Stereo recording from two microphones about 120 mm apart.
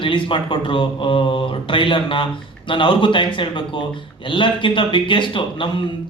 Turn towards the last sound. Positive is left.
turn(degrees=45)  # may be behind; listen again after turning